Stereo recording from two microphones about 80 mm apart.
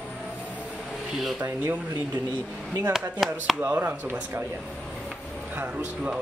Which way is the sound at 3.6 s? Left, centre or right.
Right.